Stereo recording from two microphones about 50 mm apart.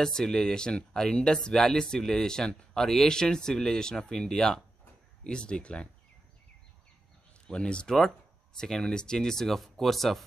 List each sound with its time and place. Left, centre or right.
0.0 s speech: centre
7.4 s speech: centre